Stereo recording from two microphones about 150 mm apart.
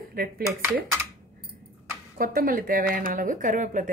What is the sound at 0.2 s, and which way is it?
Speech, 75° right (ahead or behind).